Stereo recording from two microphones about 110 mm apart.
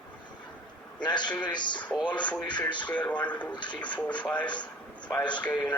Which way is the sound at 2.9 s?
10° left (ahead or behind).